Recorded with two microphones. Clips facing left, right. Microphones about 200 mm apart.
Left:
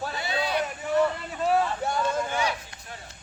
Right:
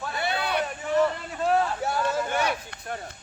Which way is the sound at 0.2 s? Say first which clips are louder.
Right 2 dB; 60° right (ahead or behind).